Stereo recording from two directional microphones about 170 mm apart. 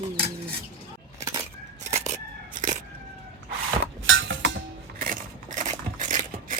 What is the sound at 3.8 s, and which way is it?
Dishes, 90° right.